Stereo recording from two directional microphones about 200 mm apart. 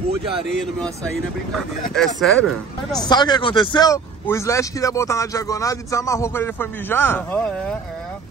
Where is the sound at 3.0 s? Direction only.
20° left (ahead or behind).